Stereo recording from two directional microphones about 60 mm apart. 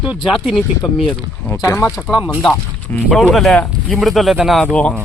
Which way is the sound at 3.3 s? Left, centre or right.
Centre.